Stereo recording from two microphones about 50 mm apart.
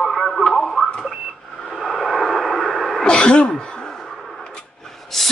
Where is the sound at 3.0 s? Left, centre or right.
Centre.